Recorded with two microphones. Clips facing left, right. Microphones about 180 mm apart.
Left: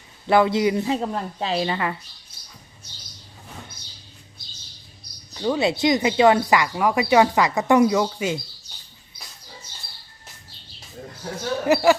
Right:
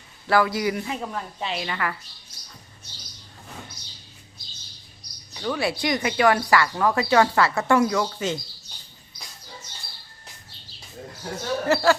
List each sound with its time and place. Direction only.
0.3 s speech: 20° left (ahead or behind)
5.4 s speech: 25° left (ahead or behind)
11.6 s speech: 15° left (ahead or behind)